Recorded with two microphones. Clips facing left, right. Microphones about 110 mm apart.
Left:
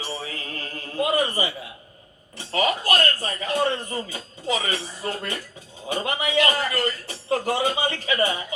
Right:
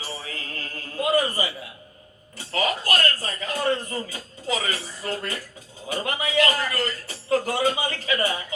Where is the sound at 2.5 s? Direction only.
25° left (ahead or behind).